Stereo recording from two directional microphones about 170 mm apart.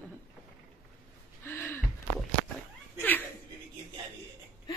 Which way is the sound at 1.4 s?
15° left (ahead or behind).